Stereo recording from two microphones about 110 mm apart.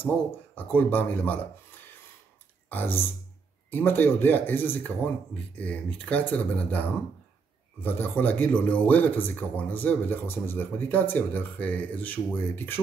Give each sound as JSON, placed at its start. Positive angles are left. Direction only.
{"t": 0.6, "sound": "speech", "side_deg": 15}
{"t": 2.7, "sound": "speech", "side_deg": 20}